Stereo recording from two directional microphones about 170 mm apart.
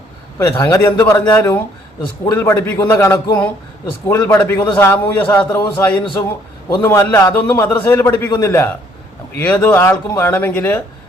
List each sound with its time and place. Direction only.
0.3 s speech: 15° left (ahead or behind)